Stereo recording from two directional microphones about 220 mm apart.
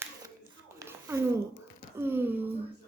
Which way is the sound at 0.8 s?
10° right (ahead or behind).